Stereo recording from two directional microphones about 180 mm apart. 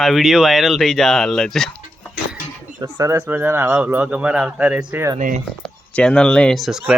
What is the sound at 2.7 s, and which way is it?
Speech, 15° right (ahead or behind).